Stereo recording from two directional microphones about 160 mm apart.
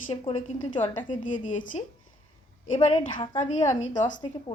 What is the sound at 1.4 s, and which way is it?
Speech, 50° left (ahead or behind).